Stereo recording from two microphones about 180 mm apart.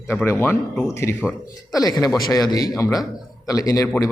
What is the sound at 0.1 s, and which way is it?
A man's voice, 15° left (ahead or behind).